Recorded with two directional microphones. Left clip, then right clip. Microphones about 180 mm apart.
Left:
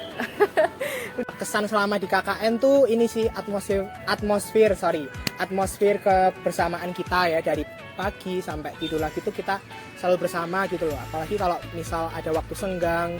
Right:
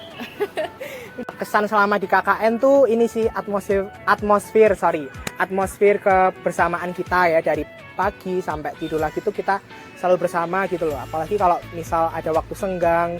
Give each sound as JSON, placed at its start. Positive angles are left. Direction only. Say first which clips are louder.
{"t": 0.2, "sound": "a sound", "louder": "left 5 dB", "side_deg": -10}
{"t": 1.4, "sound": "speech", "louder": "right 6 dB", "side_deg": 0}
{"t": 2.6, "sound": "speech", "louder": "right 2 dB", "side_deg": -30}
{"t": 2.8, "sound": "speech", "louder": "right 3 dB", "side_deg": 0}
{"t": 11.9, "sound": "speech", "louder": "right 7 dB", "side_deg": -10}